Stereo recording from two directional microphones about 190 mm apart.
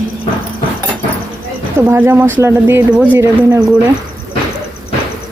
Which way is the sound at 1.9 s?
10° right (ahead or behind).